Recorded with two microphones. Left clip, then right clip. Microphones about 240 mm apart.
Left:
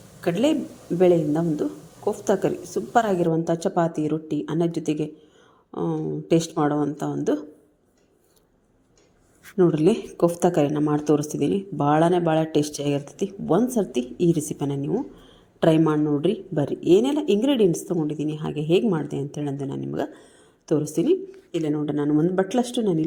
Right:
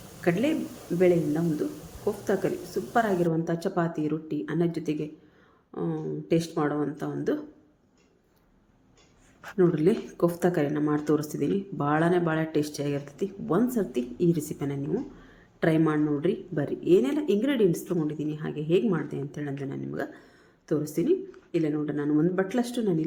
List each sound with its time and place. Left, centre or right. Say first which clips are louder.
0.3 s a woman's voice: left 4 dB; left
2.0 s a woman's voice: left 5 dB; centre
9.6 s a woman's voice: left 4 dB; centre